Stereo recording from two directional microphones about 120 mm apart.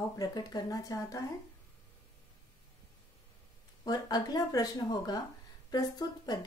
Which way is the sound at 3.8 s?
35° left (ahead or behind).